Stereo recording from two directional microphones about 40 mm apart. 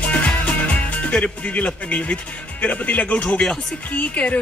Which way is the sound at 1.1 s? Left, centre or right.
Left.